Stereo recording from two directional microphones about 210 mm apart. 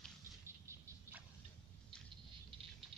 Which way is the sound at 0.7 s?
10° right (ahead or behind).